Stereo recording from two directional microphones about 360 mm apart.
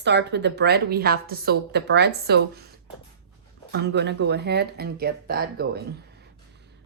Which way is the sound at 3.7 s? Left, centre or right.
Right.